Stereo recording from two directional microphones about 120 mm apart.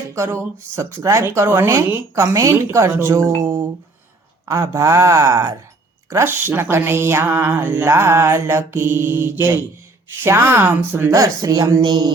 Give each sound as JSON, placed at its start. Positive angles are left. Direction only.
{"t": 0.1, "sound": "speech", "side_deg": -25}
{"t": 11.1, "sound": "speech", "side_deg": -30}